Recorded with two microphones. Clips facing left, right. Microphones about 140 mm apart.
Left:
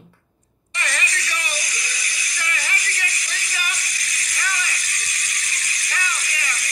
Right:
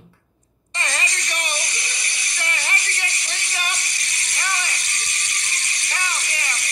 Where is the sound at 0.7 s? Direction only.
30° right (ahead or behind).